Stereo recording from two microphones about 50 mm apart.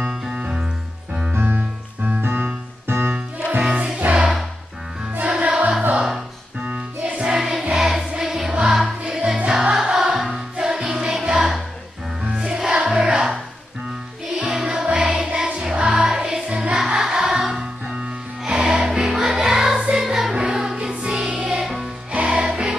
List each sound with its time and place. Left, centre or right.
0.0 s music: centre
0.3 s music: centre
1.3 s music: right
2.0 s music: right
3.1 s music: right
5.3 s music: right
7.2 s music: centre
9.0 s music: right
9.5 s music: centre
14.6 s music: centre
14.9 s music: right
21.6 s music: centre
22.1 s music: centre